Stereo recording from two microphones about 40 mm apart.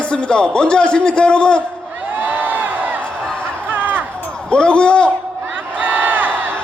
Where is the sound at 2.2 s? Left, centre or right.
Right.